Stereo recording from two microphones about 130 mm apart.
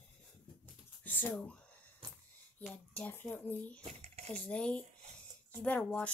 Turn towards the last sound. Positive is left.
turn(degrees=10)  # may be behind; listen again after turning